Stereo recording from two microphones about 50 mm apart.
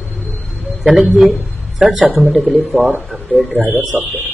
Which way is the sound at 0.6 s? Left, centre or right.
Centre.